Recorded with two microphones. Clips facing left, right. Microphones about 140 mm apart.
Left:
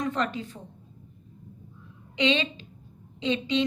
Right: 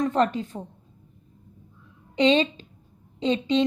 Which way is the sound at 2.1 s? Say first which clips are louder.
Right 6 dB; 40° right (ahead or behind).